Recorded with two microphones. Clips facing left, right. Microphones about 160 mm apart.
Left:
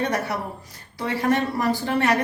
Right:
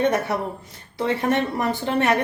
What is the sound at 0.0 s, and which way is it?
A woman's voice, 25° right (ahead or behind).